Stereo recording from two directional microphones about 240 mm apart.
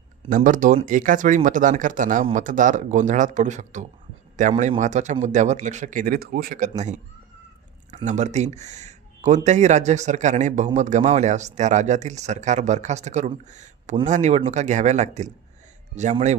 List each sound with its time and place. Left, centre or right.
0.3 s speech: right
8.0 s speech: right